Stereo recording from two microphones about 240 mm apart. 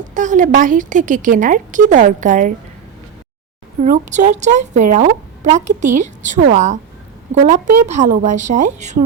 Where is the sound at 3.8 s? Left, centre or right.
Right.